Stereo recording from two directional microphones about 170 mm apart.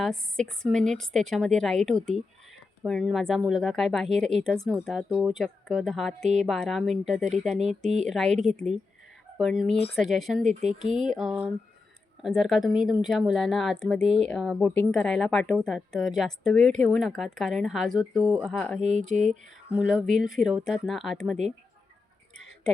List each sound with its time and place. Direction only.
0.0 s a woman's voice: 5° left (ahead or behind)
18.8 s speech: 45° right (ahead or behind)
19.7 s a woman's voice: 5° right (ahead or behind)